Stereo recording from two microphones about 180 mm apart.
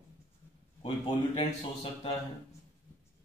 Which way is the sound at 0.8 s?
30° left (ahead or behind).